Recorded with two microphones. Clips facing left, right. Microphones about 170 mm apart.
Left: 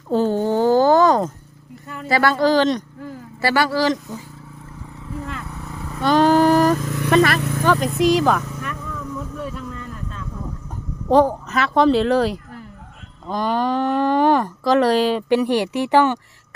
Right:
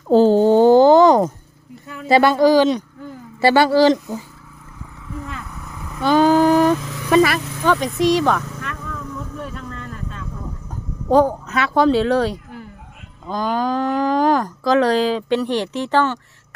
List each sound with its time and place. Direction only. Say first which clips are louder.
0.1 s a sound: right 7 dB; 30° right (ahead or behind)
2.0 s speech: right 4 dB; 20° right (ahead or behind)
3.4 s speech: right 6 dB; 25° right (ahead or behind)
5.5 s vehicle: left 2 dB; 30° left (ahead or behind)
6.0 s a sound: right 1 dB; 5° right (ahead or behind)
6.7 s vehicle: left 5 dB; 50° left (ahead or behind)
7.1 s speech: right 1 dB; 5° right (ahead or behind)
11.1 s a woman's voice: even; centre (ahead or behind)